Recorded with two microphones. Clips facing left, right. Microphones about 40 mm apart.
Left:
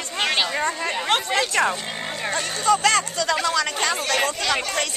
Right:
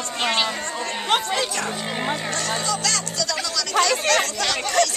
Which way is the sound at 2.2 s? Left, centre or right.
Left.